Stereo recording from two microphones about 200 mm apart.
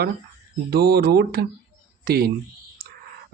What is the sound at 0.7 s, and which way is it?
Speech, 55° right (ahead or behind).